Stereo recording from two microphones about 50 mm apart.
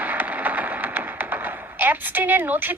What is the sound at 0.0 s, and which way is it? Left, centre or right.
Speech, right.